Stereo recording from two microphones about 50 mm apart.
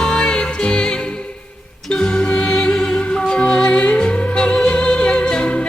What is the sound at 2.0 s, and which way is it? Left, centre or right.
Music, centre.